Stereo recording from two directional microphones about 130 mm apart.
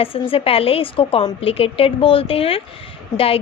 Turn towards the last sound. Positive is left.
turn(degrees=45)  # may be behind; listen again after turning